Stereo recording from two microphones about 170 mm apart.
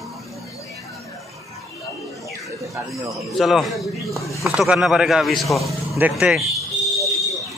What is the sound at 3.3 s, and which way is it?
A man's voice, centre (ahead or behind).